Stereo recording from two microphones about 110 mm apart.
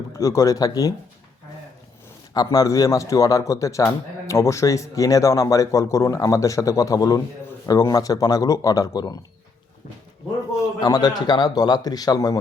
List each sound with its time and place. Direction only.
0.1 s speech: 30° left (ahead or behind)
2.3 s speech: 35° left (ahead or behind)
10.6 s speech: 35° left (ahead or behind)